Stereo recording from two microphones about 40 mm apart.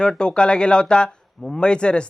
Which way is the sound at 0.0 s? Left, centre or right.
Left.